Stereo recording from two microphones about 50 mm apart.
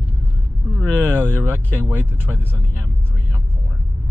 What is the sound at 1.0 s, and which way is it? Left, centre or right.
Speech, right.